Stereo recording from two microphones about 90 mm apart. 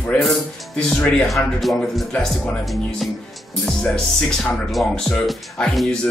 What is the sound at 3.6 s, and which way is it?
Speech, 5° left (ahead or behind).